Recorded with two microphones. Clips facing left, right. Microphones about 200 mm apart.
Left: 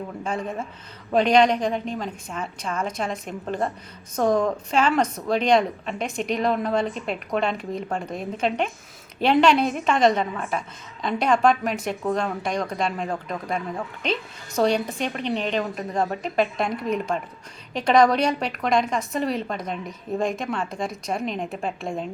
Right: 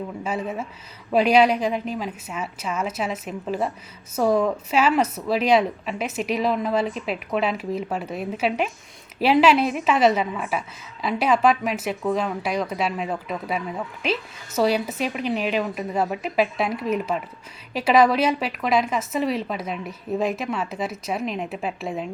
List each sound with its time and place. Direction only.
0.3 s speech: 5° right (ahead or behind)